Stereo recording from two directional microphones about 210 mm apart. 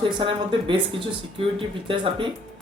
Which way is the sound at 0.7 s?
25° right (ahead or behind).